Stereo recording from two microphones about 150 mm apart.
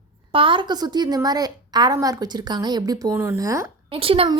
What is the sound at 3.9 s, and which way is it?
Speech, 35° right (ahead or behind).